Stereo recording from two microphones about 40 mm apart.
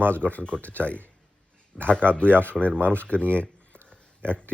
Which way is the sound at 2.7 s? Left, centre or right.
Right.